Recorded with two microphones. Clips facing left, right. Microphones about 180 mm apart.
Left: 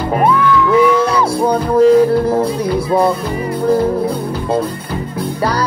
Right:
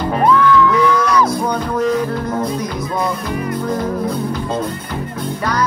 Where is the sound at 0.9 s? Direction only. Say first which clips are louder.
Left 2 dB; 30° left (ahead or behind).